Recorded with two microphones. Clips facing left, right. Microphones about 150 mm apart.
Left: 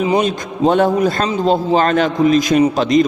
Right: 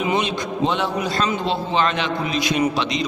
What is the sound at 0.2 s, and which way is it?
A man's voice, 45° left (ahead or behind).